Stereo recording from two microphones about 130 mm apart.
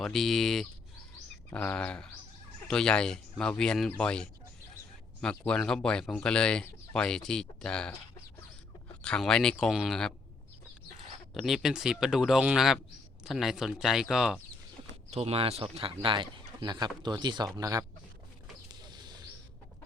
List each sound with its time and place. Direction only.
0.0 s speech: centre (ahead or behind)
5.5 s speech: 5° left (ahead or behind)
9.0 s speech: 5° left (ahead or behind)
11.3 s speech: centre (ahead or behind)
15.1 s speech: 50° right (ahead or behind); by 17.8 s 25° right (ahead or behind)
18.7 s a sound: 35° right (ahead or behind)